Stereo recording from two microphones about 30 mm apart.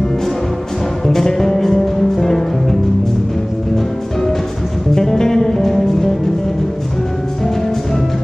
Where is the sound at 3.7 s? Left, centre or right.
Centre.